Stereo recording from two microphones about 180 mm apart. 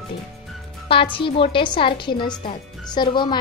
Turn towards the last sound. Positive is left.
turn(degrees=25)  # may be behind; listen again after turning